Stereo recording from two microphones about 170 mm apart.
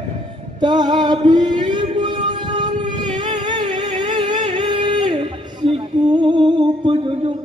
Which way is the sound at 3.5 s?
25° right (ahead or behind).